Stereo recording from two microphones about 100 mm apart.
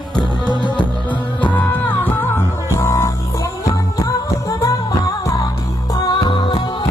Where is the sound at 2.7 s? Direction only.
30° left (ahead or behind).